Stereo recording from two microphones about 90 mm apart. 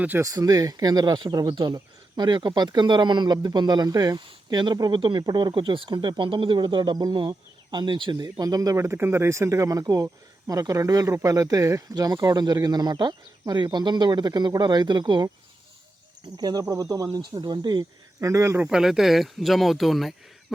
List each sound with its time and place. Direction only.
0.2 s speech: 45° right (ahead or behind)
4.2 s speech: 55° right (ahead or behind)
4.9 s speech: 65° right (ahead or behind); by 8.8 s 40° right (ahead or behind)
8.8 s speech: 25° right (ahead or behind); by 15.3 s 60° right (ahead or behind)
16.4 s speech: 50° right (ahead or behind)
18.2 s speech: 30° right (ahead or behind)
18.6 s speech: 5° right (ahead or behind)